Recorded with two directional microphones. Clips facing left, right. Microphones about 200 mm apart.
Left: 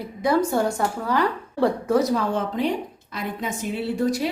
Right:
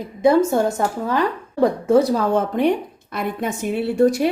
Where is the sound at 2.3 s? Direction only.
60° right (ahead or behind).